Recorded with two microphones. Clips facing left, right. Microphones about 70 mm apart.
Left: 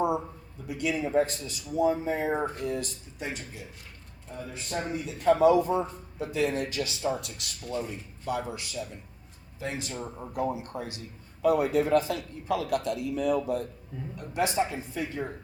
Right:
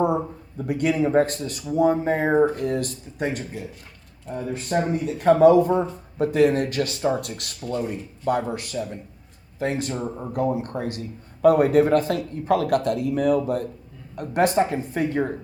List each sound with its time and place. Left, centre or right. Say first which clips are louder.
0.6 s a man's voice: right 8 dB; right